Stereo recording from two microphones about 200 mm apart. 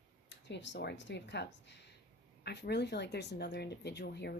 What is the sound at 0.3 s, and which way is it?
Speech, 60° left (ahead or behind).